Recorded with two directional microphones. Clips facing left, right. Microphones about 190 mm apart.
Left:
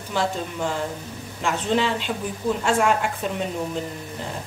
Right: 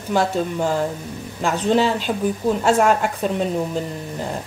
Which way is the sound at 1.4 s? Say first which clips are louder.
Right 5 dB; 40° right (ahead or behind).